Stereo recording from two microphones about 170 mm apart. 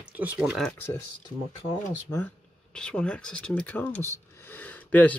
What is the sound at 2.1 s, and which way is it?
Speech, 15° left (ahead or behind).